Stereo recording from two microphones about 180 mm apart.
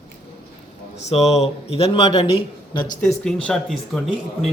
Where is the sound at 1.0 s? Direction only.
35° left (ahead or behind).